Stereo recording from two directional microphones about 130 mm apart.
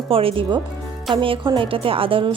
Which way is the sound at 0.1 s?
45° right (ahead or behind).